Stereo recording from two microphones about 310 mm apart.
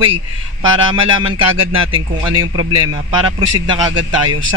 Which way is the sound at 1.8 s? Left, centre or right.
Centre.